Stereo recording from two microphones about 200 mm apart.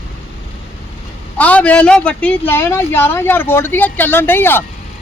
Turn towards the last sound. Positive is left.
turn(degrees=10)  # may be behind; listen again after turning